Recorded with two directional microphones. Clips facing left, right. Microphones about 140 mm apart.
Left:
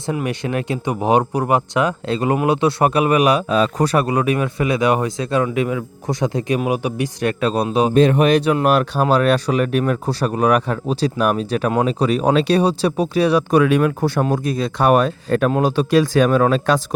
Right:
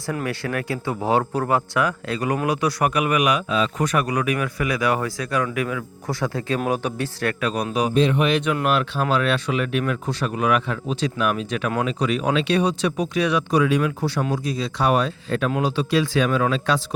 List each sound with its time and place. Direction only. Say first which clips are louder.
0.0 s speech: left 4 dB; 20° left (ahead or behind)
7.3 s speech: left 7 dB; 30° left (ahead or behind)
7.9 s speech: left 6 dB; 45° left (ahead or behind)
13.5 s speech: left 5 dB; 55° left (ahead or behind)